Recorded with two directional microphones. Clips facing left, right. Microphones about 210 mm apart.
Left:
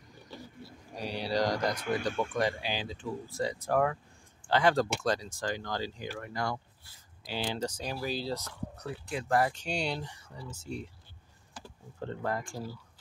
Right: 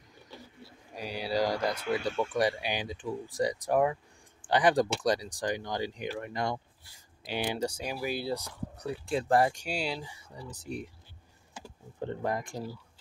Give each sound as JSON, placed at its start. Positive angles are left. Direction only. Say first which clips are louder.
{"t": 0.9, "sound": "speech", "louder": "even", "side_deg": -5}
{"t": 9.1, "sound": "speech", "louder": "right 3 dB", "side_deg": -30}
{"t": 9.5, "sound": "speech", "louder": "even", "side_deg": -10}
{"t": 10.6, "sound": "speech", "louder": "right 2 dB", "side_deg": -15}